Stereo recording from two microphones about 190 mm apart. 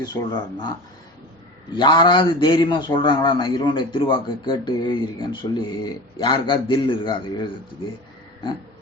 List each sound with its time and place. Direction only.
0.0 s speech: 25° left (ahead or behind)
1.7 s speech: 25° left (ahead or behind)